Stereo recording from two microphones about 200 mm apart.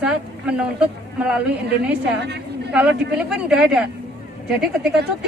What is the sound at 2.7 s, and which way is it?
Speech, 5° right (ahead or behind).